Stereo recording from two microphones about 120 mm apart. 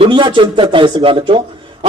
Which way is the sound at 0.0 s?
40° right (ahead or behind).